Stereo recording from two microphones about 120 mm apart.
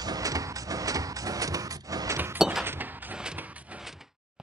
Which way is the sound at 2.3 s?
5° right (ahead or behind).